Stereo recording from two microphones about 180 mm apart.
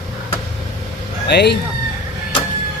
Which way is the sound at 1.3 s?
70° left (ahead or behind).